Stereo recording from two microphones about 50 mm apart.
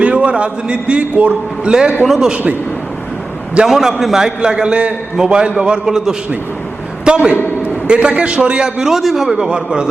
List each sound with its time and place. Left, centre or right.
0.0 s a man's voice: right
1.7 s a man's voice: centre
3.7 s a man's voice: centre